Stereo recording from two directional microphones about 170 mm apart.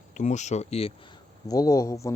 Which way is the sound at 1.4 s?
20° left (ahead or behind).